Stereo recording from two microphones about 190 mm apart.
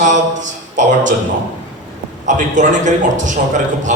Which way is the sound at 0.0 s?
40° right (ahead or behind).